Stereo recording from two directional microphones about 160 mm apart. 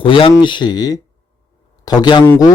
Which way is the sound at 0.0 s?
35° left (ahead or behind).